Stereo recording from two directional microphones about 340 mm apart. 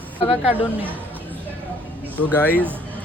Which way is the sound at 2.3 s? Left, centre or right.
Centre.